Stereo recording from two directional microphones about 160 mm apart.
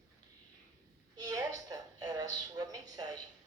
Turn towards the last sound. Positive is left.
turn(degrees=-25)  # may be behind; listen again after turning